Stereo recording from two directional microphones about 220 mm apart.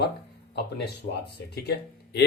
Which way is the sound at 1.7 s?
50° left (ahead or behind).